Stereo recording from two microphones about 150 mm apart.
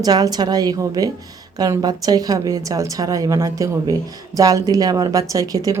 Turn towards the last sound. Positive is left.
turn(degrees=-25)  # may be behind; listen again after turning